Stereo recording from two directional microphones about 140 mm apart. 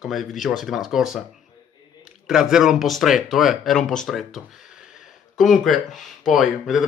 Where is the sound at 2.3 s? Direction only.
5° right (ahead or behind).